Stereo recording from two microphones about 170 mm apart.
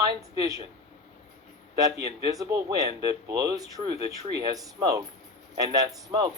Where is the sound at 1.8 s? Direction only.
20° right (ahead or behind).